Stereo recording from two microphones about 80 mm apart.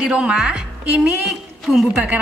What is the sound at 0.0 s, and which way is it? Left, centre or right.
A woman's voice, centre.